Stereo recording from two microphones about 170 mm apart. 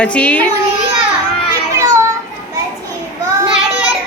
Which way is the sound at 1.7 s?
20° right (ahead or behind).